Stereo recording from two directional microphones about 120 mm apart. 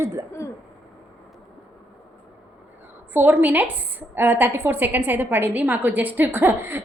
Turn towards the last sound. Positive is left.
turn(degrees=-20)  # may be behind; listen again after turning